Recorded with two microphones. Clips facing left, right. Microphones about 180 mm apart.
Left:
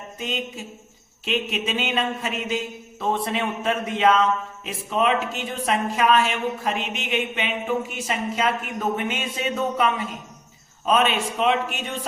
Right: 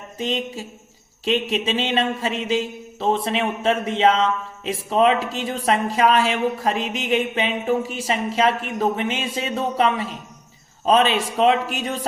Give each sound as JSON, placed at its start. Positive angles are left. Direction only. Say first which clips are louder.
{"t": 0.2, "sound": "a man's voice", "louder": "right 5 dB", "side_deg": -35}